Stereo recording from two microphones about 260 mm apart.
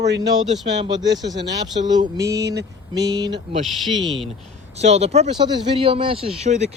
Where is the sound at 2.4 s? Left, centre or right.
Right.